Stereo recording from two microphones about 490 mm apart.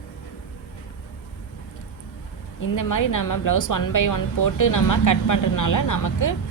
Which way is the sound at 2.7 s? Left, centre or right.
Left.